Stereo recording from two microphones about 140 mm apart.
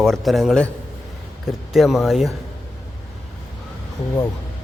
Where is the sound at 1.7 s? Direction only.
Centre (ahead or behind).